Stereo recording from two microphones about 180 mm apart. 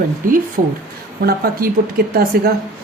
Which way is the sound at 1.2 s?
55° right (ahead or behind).